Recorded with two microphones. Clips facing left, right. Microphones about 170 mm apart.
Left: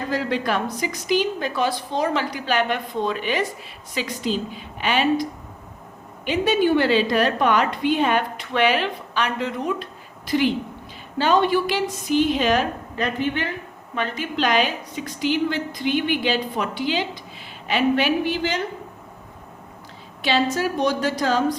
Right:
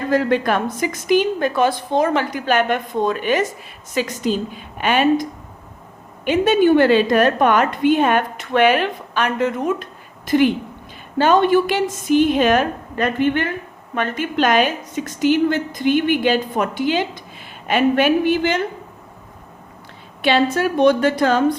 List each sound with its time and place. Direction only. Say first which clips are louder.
0.1 s a woman's voice: right 7 dB; 50° right (ahead or behind)
20.2 s a woman's voice: right 4 dB; 60° right (ahead or behind)